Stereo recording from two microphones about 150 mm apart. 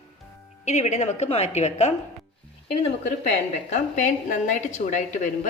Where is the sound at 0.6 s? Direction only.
50° left (ahead or behind).